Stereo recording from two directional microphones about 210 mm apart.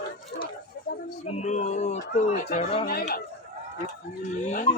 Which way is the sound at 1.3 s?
35° left (ahead or behind).